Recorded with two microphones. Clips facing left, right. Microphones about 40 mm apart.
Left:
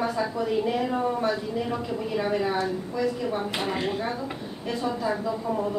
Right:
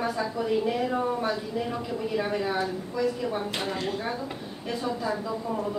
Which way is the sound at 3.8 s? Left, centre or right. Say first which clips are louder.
Left 3 dB; centre.